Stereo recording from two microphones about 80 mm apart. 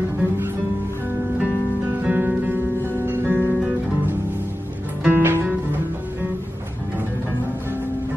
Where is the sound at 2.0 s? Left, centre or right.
Right.